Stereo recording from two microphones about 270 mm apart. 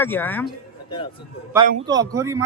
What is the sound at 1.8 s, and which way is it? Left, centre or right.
Speech, centre.